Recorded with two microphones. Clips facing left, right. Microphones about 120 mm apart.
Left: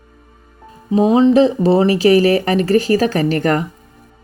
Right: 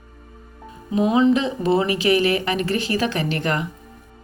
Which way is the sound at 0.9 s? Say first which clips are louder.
Left 5 dB; 35° left (ahead or behind).